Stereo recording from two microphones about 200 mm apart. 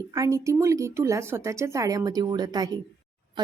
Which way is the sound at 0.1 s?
15° right (ahead or behind).